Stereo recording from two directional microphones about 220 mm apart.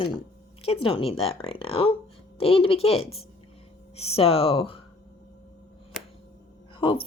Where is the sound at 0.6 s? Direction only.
25° left (ahead or behind).